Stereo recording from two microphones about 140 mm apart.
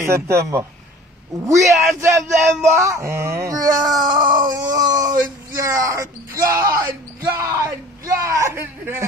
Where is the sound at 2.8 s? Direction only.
20° right (ahead or behind).